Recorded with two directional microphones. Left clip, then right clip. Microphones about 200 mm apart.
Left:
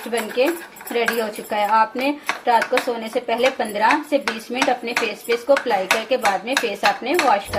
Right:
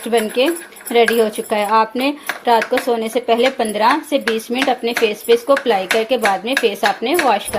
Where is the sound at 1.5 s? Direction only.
50° right (ahead or behind).